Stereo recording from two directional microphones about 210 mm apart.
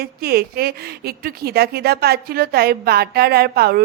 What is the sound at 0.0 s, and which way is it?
A woman's voice, 50° right (ahead or behind).